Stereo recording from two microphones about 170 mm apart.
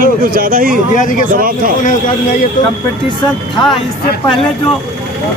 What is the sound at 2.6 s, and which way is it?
Speech, 50° left (ahead or behind).